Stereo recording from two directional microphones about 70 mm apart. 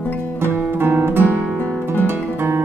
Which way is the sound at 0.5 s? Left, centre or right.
Right.